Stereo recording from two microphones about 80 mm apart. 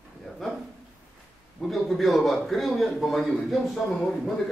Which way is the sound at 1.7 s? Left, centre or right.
Centre.